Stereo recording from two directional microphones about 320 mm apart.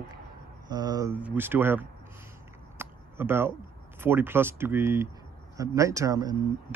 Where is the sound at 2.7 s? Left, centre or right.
Centre.